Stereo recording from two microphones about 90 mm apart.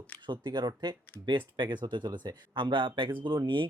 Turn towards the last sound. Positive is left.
turn(degrees=-65)  # may be behind; listen again after turning